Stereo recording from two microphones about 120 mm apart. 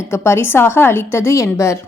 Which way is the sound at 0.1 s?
20° left (ahead or behind).